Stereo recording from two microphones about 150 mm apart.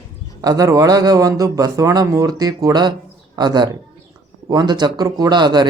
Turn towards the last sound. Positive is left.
turn(degrees=-30)  # may be behind; listen again after turning